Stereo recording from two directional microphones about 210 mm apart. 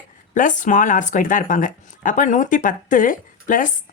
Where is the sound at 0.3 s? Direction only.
40° left (ahead or behind).